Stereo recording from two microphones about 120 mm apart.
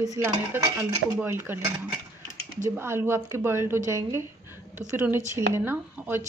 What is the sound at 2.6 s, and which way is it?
A woman's voice, 20° right (ahead or behind).